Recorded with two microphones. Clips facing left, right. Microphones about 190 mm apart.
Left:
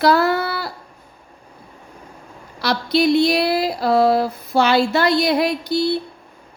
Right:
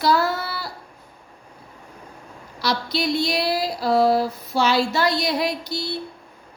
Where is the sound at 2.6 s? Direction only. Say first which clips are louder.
Left 6 dB; 60° left (ahead or behind).